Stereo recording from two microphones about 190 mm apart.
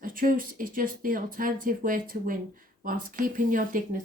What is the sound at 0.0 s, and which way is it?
Speech, 45° right (ahead or behind).